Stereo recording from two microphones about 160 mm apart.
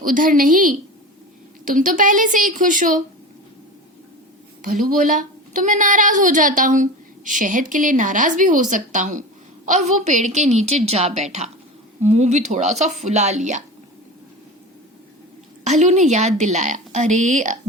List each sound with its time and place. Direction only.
0.0 s a woman's voice: 60° right (ahead or behind)
4.6 s a woman's voice: 60° right (ahead or behind)
15.6 s a woman's voice: 45° right (ahead or behind)